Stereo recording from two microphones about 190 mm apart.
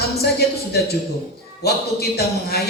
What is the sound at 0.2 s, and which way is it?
A man's voice, 55° left (ahead or behind).